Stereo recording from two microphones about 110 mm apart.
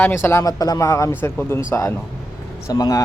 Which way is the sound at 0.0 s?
20° left (ahead or behind).